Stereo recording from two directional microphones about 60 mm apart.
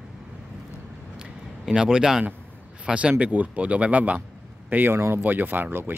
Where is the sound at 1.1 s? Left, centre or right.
Centre.